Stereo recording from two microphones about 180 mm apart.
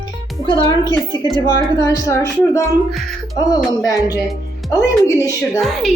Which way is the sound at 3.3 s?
20° left (ahead or behind).